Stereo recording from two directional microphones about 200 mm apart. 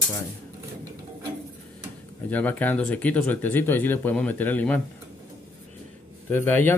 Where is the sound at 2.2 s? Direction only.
10° left (ahead or behind).